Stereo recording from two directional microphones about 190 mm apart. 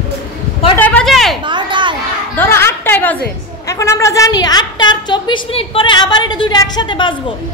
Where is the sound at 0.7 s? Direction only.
5° left (ahead or behind).